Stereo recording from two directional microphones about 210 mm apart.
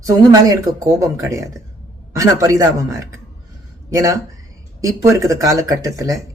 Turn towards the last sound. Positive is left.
turn(degrees=-15)  # may be behind; listen again after turning